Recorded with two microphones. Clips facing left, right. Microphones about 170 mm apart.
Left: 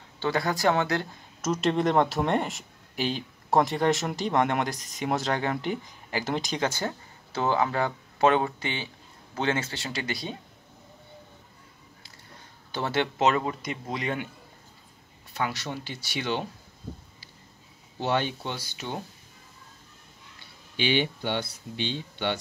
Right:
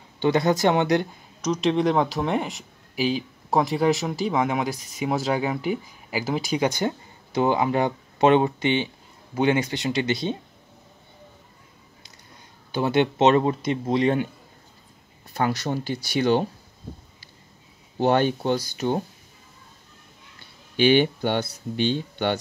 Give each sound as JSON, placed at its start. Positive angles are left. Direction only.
{"t": 0.2, "sound": "speech", "side_deg": -20}
{"t": 1.4, "sound": "speech", "side_deg": 5}
{"t": 12.7, "sound": "speech", "side_deg": -15}
{"t": 15.3, "sound": "speech", "side_deg": -40}
{"t": 17.9, "sound": "speech", "side_deg": -45}
{"t": 20.7, "sound": "speech", "side_deg": -50}